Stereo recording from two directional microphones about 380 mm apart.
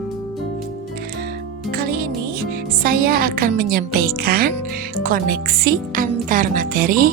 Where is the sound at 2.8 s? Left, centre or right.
Right.